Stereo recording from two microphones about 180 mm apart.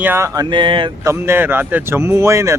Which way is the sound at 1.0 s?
15° right (ahead or behind).